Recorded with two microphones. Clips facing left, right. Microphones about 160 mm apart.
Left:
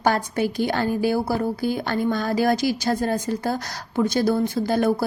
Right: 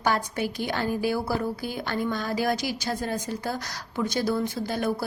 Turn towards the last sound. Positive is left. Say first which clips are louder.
# left 7 dB
turn(degrees=40)  # may be behind; listen again after turning